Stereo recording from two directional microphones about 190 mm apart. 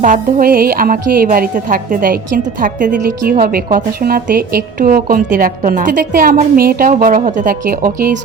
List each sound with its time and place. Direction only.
0.0 s a woman's voice: 45° right (ahead or behind)